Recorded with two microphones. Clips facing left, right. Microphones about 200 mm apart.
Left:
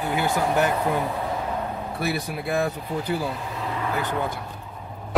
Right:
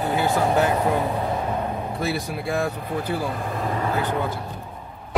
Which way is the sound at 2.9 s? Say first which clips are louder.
Right 1 dB; 55° right (ahead or behind).